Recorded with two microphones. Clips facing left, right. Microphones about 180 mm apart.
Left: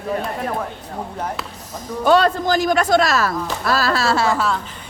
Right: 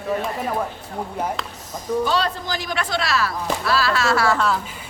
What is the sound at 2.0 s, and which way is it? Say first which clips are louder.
A man's voice: left 10 dB; 55° left (ahead or behind).